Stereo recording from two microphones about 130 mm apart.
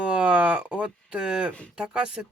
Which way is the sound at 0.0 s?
5° right (ahead or behind).